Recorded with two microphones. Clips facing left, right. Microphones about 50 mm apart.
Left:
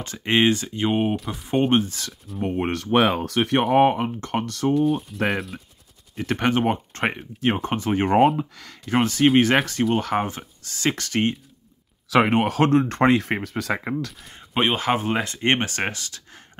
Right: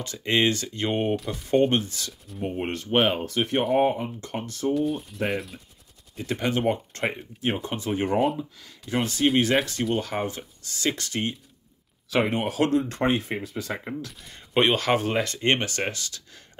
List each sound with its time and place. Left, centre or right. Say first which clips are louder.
0.0 s speech: left 3 dB; left
2.3 s speech: left 5 dB; left
5.2 s speech: left 3 dB; left
6.2 s speech: left 3 dB; left
7.1 s speech: left 4 dB; left
7.7 s speech: left 5 dB; left
8.4 s speech: left 5 dB; left
8.8 s speech: left 5 dB; left
10.2 s speech: left 1 dB; left
12.1 s speech: left 6 dB; left
13.0 s speech: left 6 dB; left
14.7 s speech: left 1 dB; centre; by 16.4 s left